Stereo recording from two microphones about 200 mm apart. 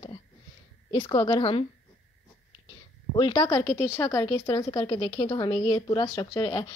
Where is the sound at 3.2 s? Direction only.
25° left (ahead or behind).